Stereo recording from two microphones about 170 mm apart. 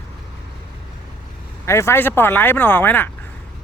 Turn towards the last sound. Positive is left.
turn(degrees=10)  # may be behind; listen again after turning